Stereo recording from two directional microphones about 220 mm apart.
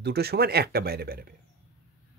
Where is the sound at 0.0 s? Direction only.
45° right (ahead or behind).